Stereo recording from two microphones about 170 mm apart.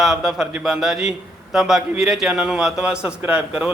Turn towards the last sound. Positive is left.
turn(degrees=-5)  # may be behind; listen again after turning